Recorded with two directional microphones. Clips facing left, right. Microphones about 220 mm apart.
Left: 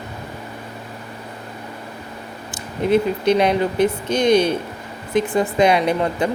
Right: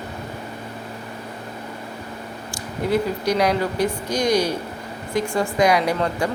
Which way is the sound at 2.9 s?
25° left (ahead or behind).